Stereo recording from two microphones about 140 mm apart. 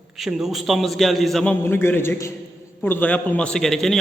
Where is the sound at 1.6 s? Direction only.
15° left (ahead or behind).